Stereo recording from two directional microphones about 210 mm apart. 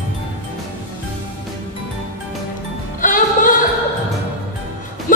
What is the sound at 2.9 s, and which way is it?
Music, 40° left (ahead or behind).